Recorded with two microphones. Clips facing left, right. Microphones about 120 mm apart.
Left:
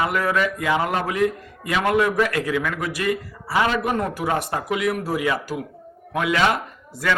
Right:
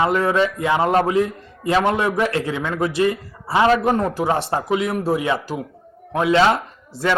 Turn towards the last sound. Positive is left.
turn(degrees=-25)  # may be behind; listen again after turning